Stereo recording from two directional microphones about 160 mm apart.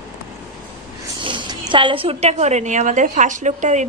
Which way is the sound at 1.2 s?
30° right (ahead or behind).